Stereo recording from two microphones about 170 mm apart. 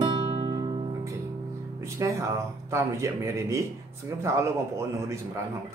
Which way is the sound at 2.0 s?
20° right (ahead or behind).